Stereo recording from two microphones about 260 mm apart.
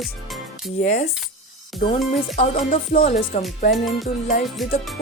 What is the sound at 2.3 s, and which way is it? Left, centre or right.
Speech, left.